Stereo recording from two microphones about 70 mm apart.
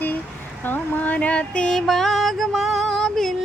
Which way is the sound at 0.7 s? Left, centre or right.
Left.